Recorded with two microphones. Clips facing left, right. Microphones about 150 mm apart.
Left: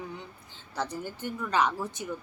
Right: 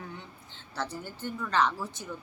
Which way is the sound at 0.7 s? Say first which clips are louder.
Left 3 dB; 15° left (ahead or behind).